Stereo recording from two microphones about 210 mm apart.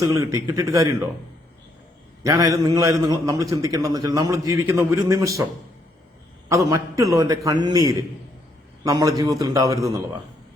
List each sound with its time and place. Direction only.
0.0 s a man's voice: 15° right (ahead or behind)
2.2 s a man's voice: 15° right (ahead or behind)
6.5 s a man's voice: 15° right (ahead or behind)